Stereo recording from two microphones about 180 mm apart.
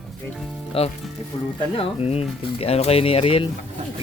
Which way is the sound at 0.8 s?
35° left (ahead or behind).